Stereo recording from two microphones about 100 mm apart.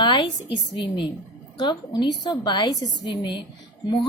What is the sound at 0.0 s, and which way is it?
A woman's voice, 55° left (ahead or behind).